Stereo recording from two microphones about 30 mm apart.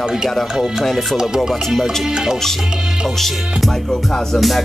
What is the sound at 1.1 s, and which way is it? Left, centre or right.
Speech, right.